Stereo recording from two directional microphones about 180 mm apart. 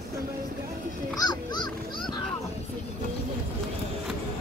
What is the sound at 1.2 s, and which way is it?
Music, 25° left (ahead or behind).